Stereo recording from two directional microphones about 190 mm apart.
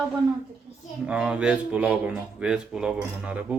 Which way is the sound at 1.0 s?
5° right (ahead or behind).